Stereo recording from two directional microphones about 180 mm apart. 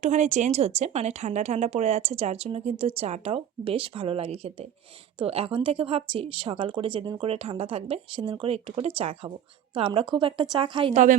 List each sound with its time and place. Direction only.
0.0 s a woman's voice: 40° right (ahead or behind)